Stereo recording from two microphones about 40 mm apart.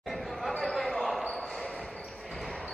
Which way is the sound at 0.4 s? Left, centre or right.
Centre.